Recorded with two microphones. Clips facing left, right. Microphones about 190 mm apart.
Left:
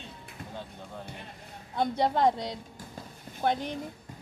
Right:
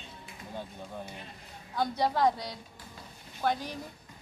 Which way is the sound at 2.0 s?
25° left (ahead or behind).